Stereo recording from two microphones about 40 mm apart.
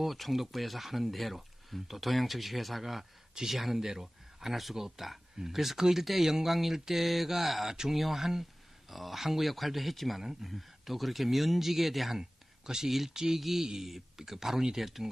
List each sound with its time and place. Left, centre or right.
0.0 s speech: centre